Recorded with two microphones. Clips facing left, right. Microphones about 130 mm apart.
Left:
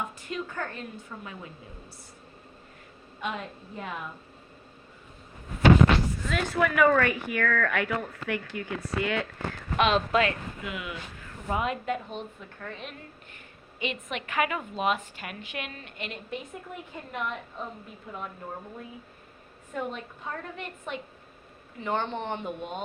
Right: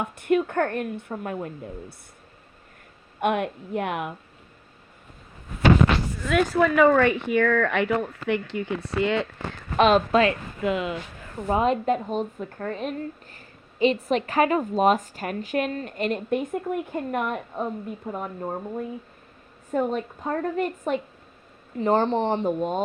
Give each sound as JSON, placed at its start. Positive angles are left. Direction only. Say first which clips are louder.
{"t": 0.0, "sound": "a woman's voice", "louder": "right 11 dB", "side_deg": -60}
{"t": 3.2, "sound": "a woman's voice", "louder": "right 11 dB", "side_deg": -65}
{"t": 6.5, "sound": "speech", "louder": "right 3 dB", "side_deg": -30}
{"t": 9.7, "sound": "a woman's voice", "louder": "right 6 dB", "side_deg": -35}
{"t": 19.7, "sound": "a woman's voice", "louder": "right 9 dB", "side_deg": -40}